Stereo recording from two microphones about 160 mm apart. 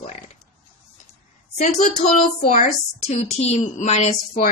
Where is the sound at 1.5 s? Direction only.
45° left (ahead or behind).